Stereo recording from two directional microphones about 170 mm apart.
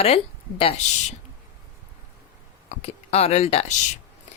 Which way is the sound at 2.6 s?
35° left (ahead or behind).